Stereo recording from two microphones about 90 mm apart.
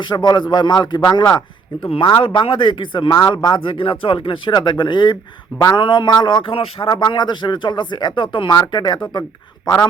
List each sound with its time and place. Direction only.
0.0 s a man's voice: 55° left (ahead or behind)
1.8 s a man's voice: 60° left (ahead or behind)
2.2 s a man's voice: 75° left (ahead or behind); by 9.0 s 55° left (ahead or behind)